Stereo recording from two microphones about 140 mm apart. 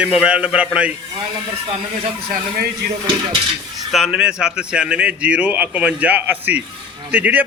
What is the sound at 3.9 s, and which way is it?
A man's voice, centre (ahead or behind).